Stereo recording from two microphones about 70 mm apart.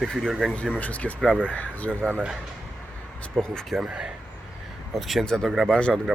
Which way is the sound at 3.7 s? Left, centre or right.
Centre.